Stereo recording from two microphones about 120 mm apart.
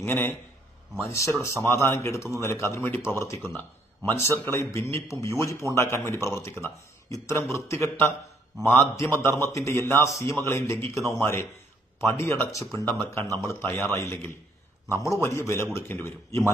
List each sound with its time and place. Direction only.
0.0 s speech: 20° left (ahead or behind)
8.5 s a man's voice: centre (ahead or behind)
8.9 s speech: 20° left (ahead or behind)